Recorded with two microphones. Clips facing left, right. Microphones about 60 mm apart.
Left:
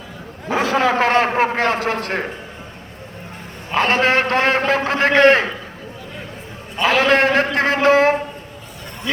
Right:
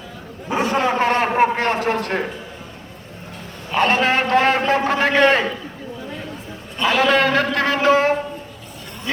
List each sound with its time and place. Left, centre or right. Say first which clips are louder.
0.5 s a man's voice: left 2 dB; left
3.8 s a man's voice: left 1 dB; left
6.8 s a man's voice: left 1 dB; left
7.1 s speech: left 1 dB; left